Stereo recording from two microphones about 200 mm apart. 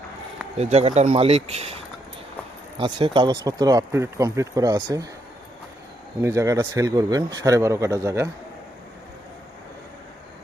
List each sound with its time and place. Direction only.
0.5 s speech: 35° right (ahead or behind); by 5.0 s 15° right (ahead or behind)
6.2 s speech: 15° right (ahead or behind)